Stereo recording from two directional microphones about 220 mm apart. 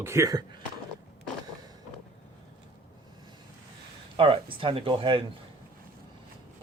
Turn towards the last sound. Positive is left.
turn(degrees=-25)  # may be behind; listen again after turning